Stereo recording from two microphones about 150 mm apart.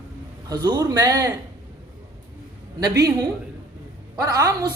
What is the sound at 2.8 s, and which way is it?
Speech, 25° right (ahead or behind).